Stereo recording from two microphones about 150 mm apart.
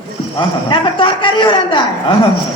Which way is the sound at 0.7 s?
35° left (ahead or behind).